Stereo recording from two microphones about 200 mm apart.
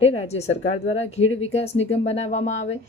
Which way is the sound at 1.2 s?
80° left.